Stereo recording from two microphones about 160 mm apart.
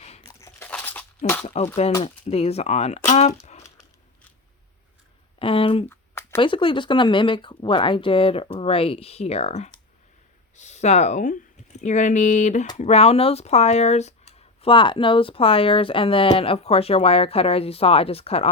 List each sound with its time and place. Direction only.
0.2 s crunch: 20° left (ahead or behind)
0.7 s a sound: 10° left (ahead or behind)
1.5 s speech: 45° left (ahead or behind)
5.4 s speech: 35° left (ahead or behind)
5.8 s a sound: 15° left (ahead or behind)
6.3 s speech: 30° left (ahead or behind)